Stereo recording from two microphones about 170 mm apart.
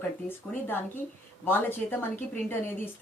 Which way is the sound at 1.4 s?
10° left (ahead or behind).